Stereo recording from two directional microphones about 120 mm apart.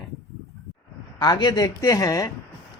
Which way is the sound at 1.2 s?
35° left (ahead or behind).